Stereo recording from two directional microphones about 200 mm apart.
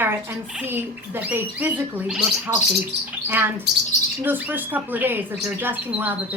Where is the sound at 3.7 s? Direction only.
60° right (ahead or behind).